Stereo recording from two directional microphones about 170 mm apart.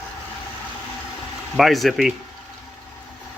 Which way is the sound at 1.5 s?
Centre (ahead or behind).